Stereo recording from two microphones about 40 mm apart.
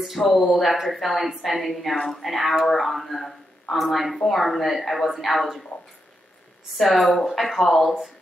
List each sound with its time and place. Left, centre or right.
0.0 s a woman's voice: centre
6.8 s a woman's voice: centre